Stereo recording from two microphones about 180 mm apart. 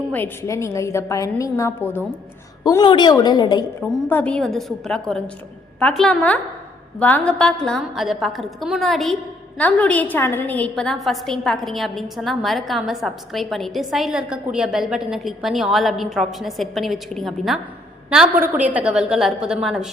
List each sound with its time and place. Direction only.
0.1 s a woman's voice: 15° left (ahead or behind)
2.6 s a woman's voice: 25° left (ahead or behind)
4.1 s a woman's voice: 5° left (ahead or behind)